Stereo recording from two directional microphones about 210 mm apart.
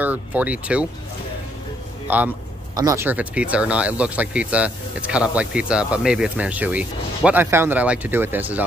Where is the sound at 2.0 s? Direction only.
10° right (ahead or behind).